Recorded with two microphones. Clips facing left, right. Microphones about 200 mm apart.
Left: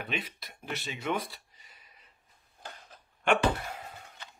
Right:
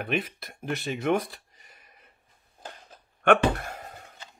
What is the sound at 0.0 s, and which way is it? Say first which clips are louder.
Speech: right 7 dB; 50° right (ahead or behind).